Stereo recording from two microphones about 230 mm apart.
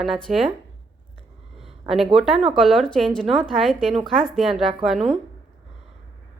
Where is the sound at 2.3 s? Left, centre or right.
Right.